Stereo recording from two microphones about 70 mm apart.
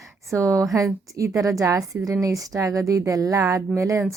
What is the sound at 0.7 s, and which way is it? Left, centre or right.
Speech, right.